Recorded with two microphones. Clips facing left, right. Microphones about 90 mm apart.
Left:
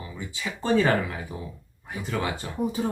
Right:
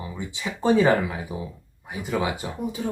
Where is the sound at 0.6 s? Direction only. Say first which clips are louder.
Right 3 dB; 15° right (ahead or behind).